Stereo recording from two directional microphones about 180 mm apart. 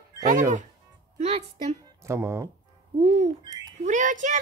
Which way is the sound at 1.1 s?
35° right (ahead or behind).